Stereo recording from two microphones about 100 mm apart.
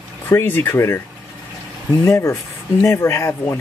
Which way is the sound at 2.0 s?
25° left (ahead or behind).